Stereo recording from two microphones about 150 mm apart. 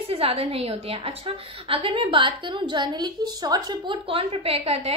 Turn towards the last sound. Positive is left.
turn(degrees=-40)  # may be behind; listen again after turning